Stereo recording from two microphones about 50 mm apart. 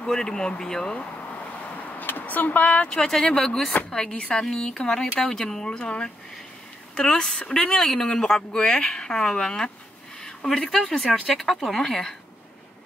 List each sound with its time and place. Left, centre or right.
0.0 s speech: centre
0.9 s speech: left; by 12.2 s centre